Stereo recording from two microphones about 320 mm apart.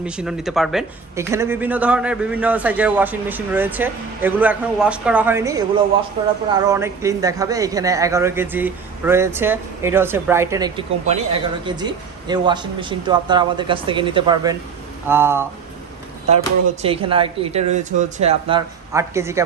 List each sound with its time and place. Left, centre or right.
0.0 s a man's voice: centre
16.8 s a man's voice: centre